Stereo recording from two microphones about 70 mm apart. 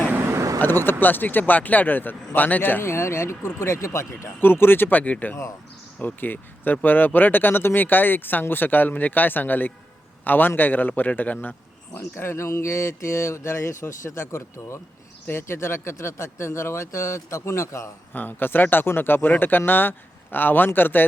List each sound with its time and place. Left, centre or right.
0.1 s vehicle: right
0.6 s speech: left
2.8 s speech: left
4.4 s speech: left
11.9 s speech: left
18.1 s speech: left